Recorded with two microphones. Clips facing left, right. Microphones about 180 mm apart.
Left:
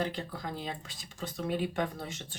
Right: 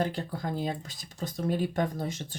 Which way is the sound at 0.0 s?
45° right (ahead or behind).